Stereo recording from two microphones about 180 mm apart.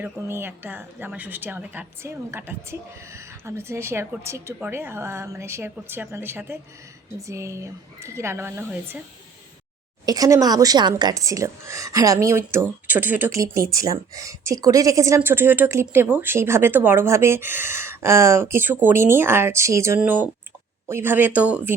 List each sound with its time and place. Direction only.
0.0 s speech: 15° right (ahead or behind)
10.1 s speech: 20° right (ahead or behind)